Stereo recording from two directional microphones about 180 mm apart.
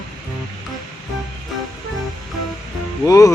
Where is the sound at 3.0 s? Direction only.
20° left (ahead or behind).